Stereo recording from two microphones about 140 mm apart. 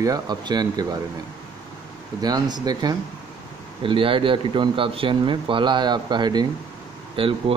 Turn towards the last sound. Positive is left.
turn(degrees=-40)  # may be behind; listen again after turning